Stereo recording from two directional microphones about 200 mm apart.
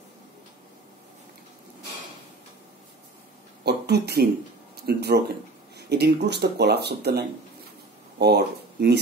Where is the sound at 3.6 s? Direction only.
55° right (ahead or behind).